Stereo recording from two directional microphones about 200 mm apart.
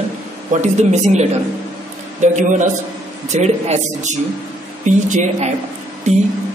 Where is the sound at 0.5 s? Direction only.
40° right (ahead or behind).